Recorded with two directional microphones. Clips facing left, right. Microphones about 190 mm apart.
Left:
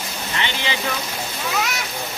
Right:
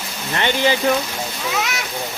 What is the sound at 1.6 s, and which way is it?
Speech, centre (ahead or behind).